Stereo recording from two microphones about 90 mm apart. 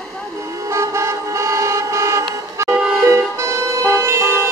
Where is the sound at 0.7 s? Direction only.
30° right (ahead or behind).